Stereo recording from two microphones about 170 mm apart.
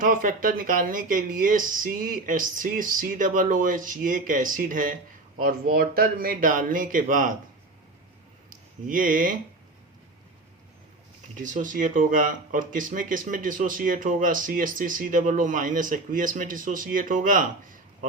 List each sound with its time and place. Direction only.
0.0 s a man's voice: 55° right (ahead or behind)
8.4 s a sound: 55° right (ahead or behind)
11.4 s speech: 50° right (ahead or behind)